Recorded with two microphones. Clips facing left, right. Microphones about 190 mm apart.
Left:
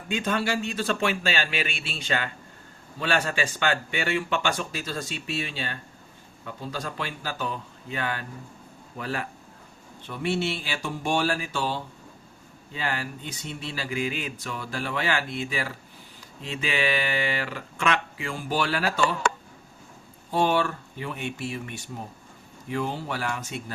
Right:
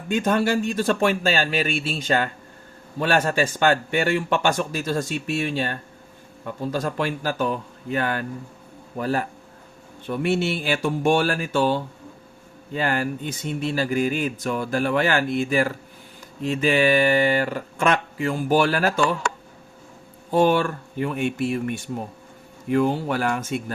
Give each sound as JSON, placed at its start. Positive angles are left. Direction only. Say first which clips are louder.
{"t": 0.1, "sound": "speech", "louder": "right 6 dB", "side_deg": -50}
{"t": 20.3, "sound": "speech", "louder": "right 5 dB", "side_deg": -50}